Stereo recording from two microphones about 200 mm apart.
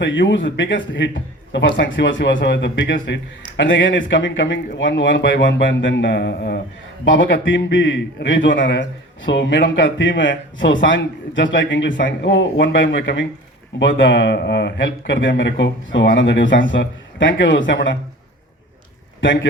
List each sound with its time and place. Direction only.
0.0 s a man's voice: 65° left (ahead or behind)
7.0 s a man's voice: 65° left (ahead or behind)
19.2 s a man's voice: 65° left (ahead or behind)